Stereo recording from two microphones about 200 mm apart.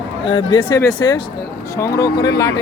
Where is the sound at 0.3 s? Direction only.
25° left (ahead or behind).